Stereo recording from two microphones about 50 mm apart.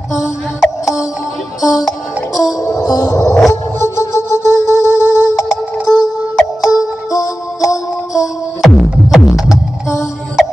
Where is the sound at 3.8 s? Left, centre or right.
Left.